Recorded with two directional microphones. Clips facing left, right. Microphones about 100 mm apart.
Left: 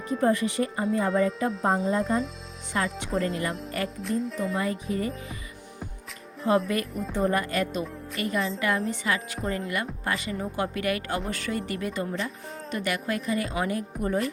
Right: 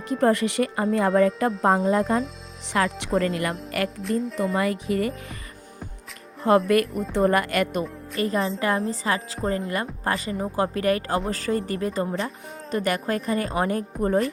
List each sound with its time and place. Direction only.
0.1 s speech: 70° right (ahead or behind); by 3.1 s 90° right
3.8 s speech: centre (ahead or behind)
4.5 s speech: 75° right (ahead or behind)
6.5 s speech: 70° right (ahead or behind)
8.1 s speech: 35° right (ahead or behind)